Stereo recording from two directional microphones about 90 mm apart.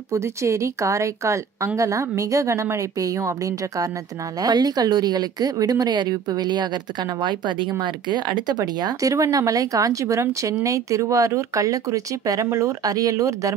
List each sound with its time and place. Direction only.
0.1 s speech: 35° right (ahead or behind)
9.1 s speech: 35° right (ahead or behind)